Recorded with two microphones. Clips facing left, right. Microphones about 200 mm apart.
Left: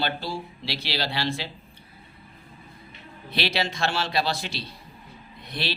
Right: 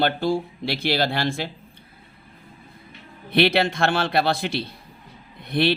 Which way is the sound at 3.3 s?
55° right (ahead or behind).